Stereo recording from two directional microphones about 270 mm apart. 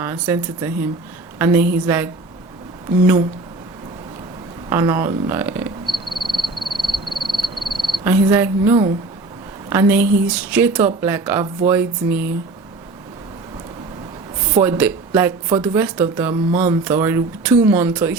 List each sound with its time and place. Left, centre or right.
0.0 s speech: centre
4.7 s a sound: centre
9.6 s speech: centre
14.5 s speech: centre